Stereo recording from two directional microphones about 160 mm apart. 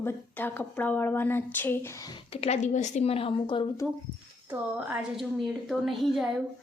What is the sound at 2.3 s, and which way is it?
A woman's voice, 40° left (ahead or behind).